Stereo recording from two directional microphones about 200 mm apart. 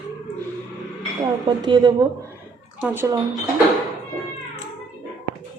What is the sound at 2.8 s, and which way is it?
Speech, 10° right (ahead or behind).